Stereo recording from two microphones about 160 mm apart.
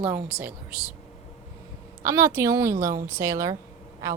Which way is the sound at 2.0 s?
20° right (ahead or behind).